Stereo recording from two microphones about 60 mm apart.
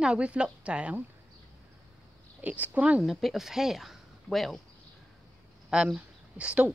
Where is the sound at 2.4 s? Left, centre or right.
Right.